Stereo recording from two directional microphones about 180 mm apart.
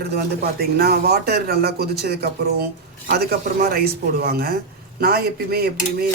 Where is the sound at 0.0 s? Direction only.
60° right (ahead or behind).